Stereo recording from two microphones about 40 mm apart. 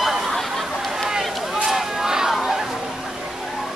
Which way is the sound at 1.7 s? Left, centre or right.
Centre.